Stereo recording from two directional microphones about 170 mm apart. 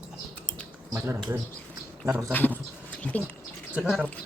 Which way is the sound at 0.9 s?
15° right (ahead or behind).